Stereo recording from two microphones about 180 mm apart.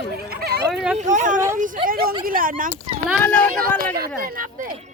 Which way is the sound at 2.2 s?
50° right (ahead or behind).